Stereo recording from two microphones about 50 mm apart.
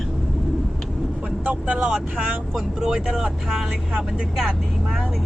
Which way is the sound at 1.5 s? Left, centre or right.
Right.